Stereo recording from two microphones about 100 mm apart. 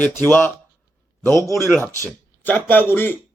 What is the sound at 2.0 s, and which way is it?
Speech, 20° left (ahead or behind).